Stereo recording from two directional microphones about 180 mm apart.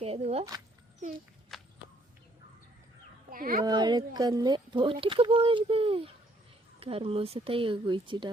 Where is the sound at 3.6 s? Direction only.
25° right (ahead or behind).